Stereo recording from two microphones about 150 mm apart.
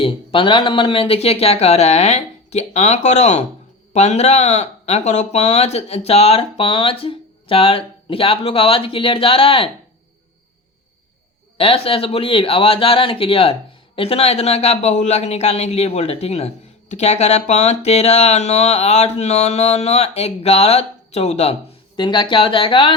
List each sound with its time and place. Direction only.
0.0 s speech: 35° left (ahead or behind)
11.5 s speech: 40° left (ahead or behind)
21.9 s speech: 30° left (ahead or behind)